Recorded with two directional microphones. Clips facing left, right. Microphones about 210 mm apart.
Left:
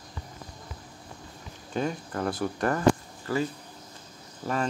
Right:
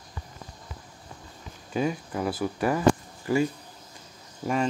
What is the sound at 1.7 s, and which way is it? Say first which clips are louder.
Speech: right 2 dB; 5° right (ahead or behind).